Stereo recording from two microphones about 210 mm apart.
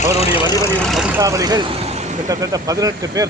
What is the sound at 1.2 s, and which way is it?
Speech, 15° right (ahead or behind).